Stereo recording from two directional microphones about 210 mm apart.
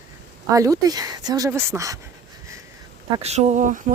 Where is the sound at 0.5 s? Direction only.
15° right (ahead or behind).